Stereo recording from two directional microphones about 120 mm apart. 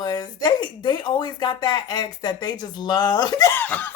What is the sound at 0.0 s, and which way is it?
Speech, 35° left (ahead or behind).